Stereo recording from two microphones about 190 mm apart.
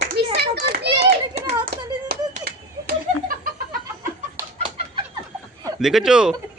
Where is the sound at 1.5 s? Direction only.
55° right (ahead or behind).